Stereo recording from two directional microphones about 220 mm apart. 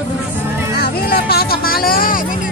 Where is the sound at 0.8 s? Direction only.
45° left (ahead or behind).